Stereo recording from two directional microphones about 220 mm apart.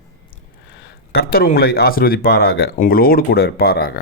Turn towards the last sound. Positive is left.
turn(degrees=45)  # may be behind; listen again after turning